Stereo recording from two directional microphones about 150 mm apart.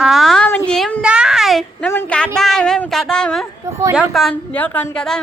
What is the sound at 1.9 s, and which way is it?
Speech, 10° left (ahead or behind).